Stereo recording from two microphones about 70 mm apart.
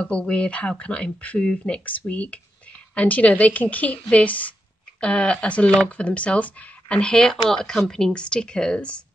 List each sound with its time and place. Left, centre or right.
0.0 s a woman's voice: centre